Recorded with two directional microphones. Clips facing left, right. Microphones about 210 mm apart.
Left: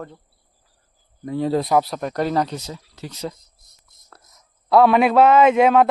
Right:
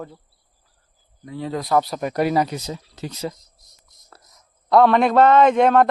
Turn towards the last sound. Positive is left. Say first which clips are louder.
# left 1 dB
turn(degrees=5)  # may be behind; listen again after turning